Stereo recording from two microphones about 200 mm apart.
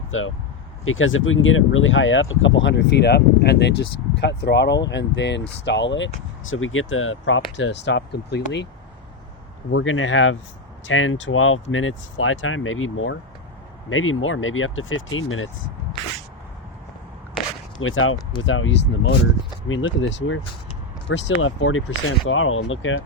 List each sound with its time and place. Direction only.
0.1 s speech: 85° left
7.5 s speech: 60° left (ahead or behind)
9.7 s speech: 80° left
17.7 s speech: 90° left
18.4 s speech: 75° left (ahead or behind)
19.6 s speech: 80° left